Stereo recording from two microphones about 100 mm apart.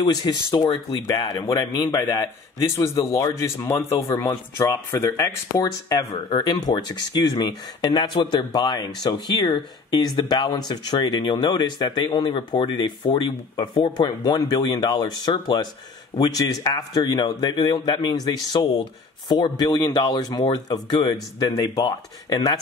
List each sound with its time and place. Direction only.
0.0 s a man's voice: 40° left (ahead or behind)
2.7 s a man's voice: 30° left (ahead or behind); by 15.7 s 50° left (ahead or behind)
16.2 s a man's voice: 40° left (ahead or behind)